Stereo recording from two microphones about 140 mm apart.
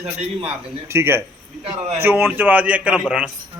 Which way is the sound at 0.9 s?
15° right (ahead or behind).